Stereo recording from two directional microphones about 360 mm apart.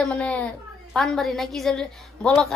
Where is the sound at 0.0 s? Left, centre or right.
Centre.